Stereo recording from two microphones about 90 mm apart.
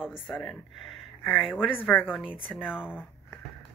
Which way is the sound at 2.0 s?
10° right (ahead or behind).